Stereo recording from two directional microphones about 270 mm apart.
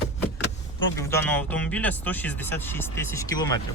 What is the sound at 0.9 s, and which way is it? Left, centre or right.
Speech, centre.